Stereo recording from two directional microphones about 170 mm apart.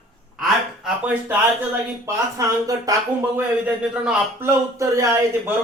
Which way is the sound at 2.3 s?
20° right (ahead or behind).